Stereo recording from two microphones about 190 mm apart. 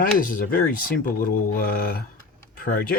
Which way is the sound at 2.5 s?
50° left (ahead or behind).